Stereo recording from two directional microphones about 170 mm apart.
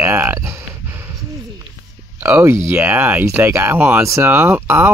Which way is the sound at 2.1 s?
15° right (ahead or behind).